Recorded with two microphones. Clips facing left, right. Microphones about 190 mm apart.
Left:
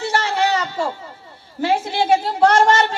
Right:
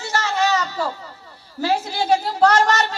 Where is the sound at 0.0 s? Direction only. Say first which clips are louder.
Left 2 dB; 30° left (ahead or behind).